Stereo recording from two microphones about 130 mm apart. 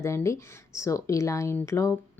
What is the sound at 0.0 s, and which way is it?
Speech, 20° left (ahead or behind).